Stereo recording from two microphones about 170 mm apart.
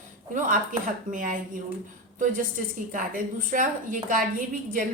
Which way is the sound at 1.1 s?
50° right (ahead or behind).